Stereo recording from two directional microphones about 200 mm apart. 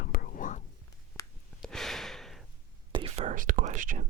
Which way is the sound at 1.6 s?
Centre (ahead or behind).